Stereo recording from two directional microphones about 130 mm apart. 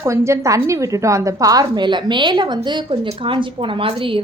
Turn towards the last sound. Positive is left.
turn(degrees=-45)  # may be behind; listen again after turning